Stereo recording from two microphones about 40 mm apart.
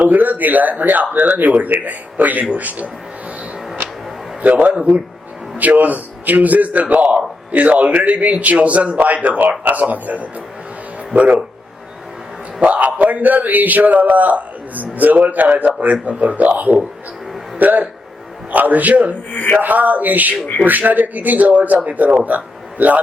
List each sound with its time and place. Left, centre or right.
0.0 s a man's voice: right
4.4 s speech: right
5.5 s a man's voice: right
12.5 s speech: right
17.6 s a man's voice: right